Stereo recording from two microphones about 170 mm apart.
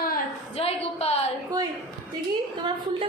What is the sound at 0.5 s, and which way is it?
Speech, 35° left (ahead or behind).